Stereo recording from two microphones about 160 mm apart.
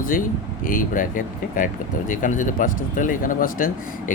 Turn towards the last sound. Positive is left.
turn(degrees=60)  # may be behind; listen again after turning